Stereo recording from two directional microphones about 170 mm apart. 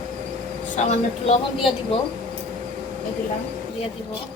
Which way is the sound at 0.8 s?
45° left (ahead or behind).